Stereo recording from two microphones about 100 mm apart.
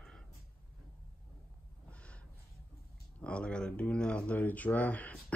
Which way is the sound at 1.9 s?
10° left (ahead or behind).